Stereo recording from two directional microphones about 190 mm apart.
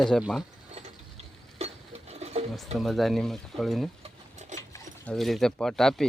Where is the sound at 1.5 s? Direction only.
35° right (ahead or behind).